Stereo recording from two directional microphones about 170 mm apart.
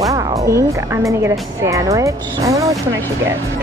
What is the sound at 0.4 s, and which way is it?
Speech, 20° right (ahead or behind).